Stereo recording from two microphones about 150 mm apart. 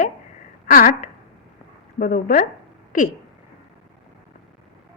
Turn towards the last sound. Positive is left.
turn(degrees=65)  # may be behind; listen again after turning